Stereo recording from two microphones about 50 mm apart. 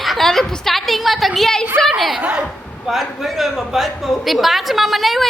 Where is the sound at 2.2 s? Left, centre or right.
Right.